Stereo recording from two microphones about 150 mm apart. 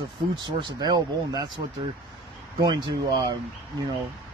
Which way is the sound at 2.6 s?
30° right (ahead or behind).